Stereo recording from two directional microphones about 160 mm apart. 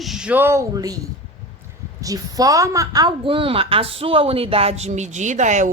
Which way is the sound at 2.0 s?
20° right (ahead or behind).